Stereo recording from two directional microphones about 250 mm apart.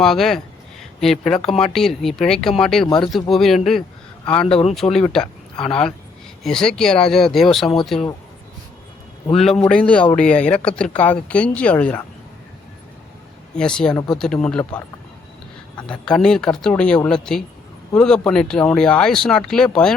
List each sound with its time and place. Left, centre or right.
0.0 s speech: centre
2.8 s speech: centre
3.2 s speech: centre
4.4 s speech: left
4.7 s speech: centre
9.2 s speech: left
9.5 s speech: centre
13.6 s speech: centre
15.8 s speech: centre